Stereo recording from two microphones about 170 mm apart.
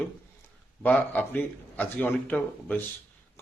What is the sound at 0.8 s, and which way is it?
A man's voice, 10° left (ahead or behind).